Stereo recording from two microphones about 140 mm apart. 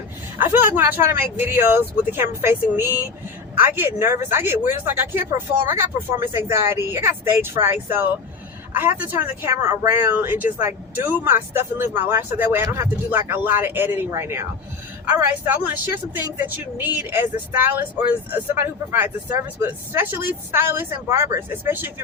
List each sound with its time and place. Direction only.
0.3 s speech: 15° right (ahead or behind)